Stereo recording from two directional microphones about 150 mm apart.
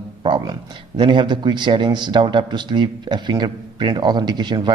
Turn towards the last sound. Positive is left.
turn(degrees=-30)  # may be behind; listen again after turning